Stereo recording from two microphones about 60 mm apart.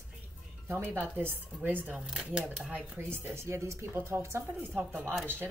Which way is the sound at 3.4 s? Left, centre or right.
Right.